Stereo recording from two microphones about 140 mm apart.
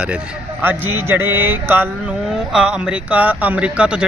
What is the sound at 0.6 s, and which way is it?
Speech, 15° right (ahead or behind).